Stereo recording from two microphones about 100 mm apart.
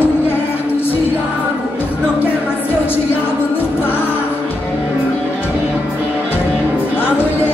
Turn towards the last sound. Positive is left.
turn(degrees=20)  # may be behind; listen again after turning